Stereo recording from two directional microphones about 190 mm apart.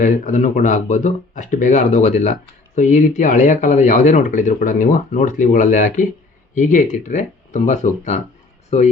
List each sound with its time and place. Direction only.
0.0 s speech: 40° left (ahead or behind)